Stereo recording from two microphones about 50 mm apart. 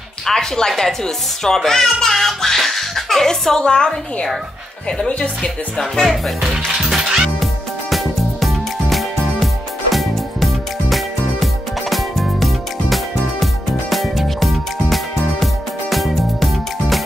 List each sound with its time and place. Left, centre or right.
0.3 s a child's voice: centre
6.4 s music: centre